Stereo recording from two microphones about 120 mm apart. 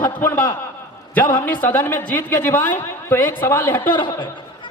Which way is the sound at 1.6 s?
20° left (ahead or behind).